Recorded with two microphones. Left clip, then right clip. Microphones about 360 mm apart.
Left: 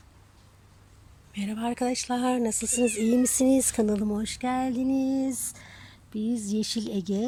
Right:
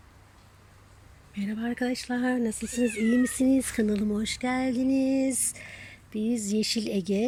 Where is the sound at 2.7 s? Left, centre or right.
Left.